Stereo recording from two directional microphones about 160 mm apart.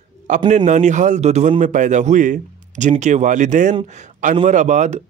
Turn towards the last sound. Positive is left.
turn(degrees=-50)  # may be behind; listen again after turning